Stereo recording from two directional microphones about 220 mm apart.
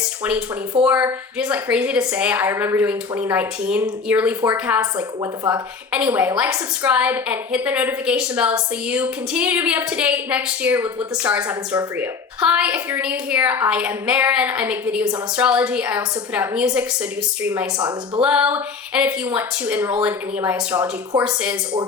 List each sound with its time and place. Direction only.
0.9 s a woman's voice: 10° right (ahead or behind)
18.2 s a woman's voice: 5° right (ahead or behind)